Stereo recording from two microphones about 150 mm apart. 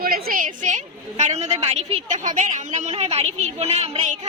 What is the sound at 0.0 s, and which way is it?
A woman's voice, 70° right (ahead or behind).